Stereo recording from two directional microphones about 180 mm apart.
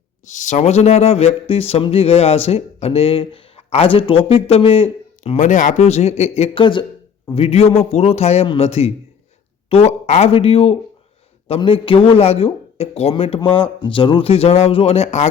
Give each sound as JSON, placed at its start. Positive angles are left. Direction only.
{"t": 0.3, "sound": "speech", "side_deg": 40}